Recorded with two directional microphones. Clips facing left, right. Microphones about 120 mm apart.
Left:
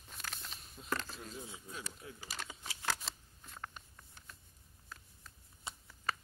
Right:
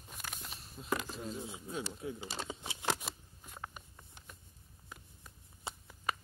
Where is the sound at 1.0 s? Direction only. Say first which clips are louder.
Right 4 dB; 10° right (ahead or behind).